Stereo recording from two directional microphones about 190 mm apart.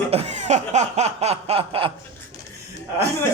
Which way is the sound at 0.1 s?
35° right (ahead or behind).